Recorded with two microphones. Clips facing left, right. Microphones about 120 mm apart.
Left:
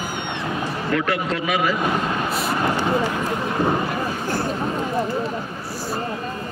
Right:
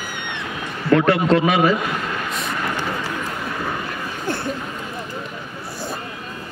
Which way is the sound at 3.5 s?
30° left (ahead or behind).